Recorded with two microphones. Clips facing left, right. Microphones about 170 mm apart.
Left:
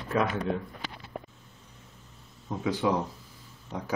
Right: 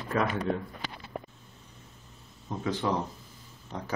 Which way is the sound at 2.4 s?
10° left (ahead or behind).